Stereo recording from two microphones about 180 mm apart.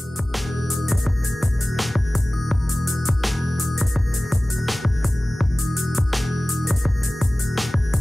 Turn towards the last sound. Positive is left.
turn(degrees=0)  # may be behind; listen again after turning